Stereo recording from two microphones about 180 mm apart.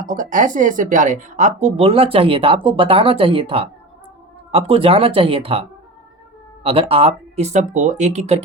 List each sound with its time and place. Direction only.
0.0 s speech: 45° right (ahead or behind)